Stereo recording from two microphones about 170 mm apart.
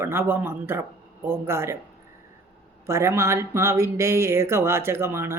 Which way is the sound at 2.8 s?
15° right (ahead or behind).